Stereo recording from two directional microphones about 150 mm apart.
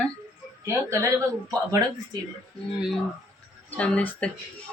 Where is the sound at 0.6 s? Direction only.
20° right (ahead or behind).